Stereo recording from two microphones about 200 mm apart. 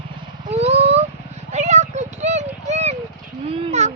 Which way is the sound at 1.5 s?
35° right (ahead or behind).